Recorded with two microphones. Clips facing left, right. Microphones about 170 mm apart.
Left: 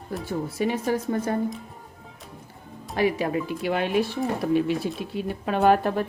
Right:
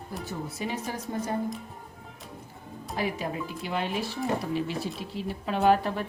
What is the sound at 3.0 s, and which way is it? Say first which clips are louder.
Speech: left 7 dB; 70° left (ahead or behind).